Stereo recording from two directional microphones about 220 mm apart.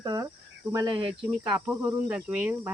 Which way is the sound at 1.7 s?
10° right (ahead or behind).